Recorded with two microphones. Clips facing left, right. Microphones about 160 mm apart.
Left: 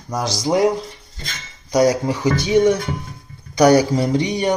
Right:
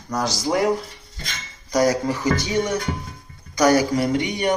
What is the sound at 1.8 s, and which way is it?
Speech, 20° left (ahead or behind).